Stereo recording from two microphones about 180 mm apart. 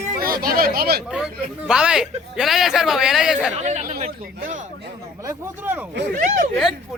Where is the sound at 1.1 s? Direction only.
5° right (ahead or behind).